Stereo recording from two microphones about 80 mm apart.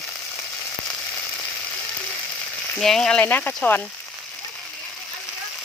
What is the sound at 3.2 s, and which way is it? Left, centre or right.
Speech, left.